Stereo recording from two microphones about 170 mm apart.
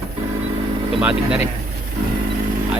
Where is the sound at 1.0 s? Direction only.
5° right (ahead or behind).